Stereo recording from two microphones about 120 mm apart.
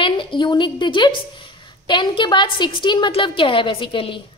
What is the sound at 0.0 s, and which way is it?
A woman's voice, 45° left (ahead or behind).